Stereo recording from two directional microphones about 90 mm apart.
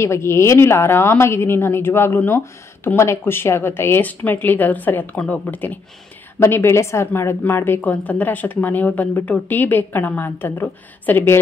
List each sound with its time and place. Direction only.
0.0 s a woman's voice: 30° left (ahead or behind)
6.4 s a woman's voice: 30° left (ahead or behind)